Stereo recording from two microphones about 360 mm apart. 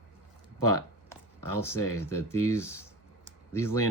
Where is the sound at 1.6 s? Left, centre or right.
Centre.